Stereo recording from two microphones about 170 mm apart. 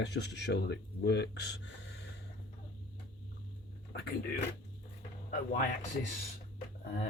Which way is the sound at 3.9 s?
70° left (ahead or behind).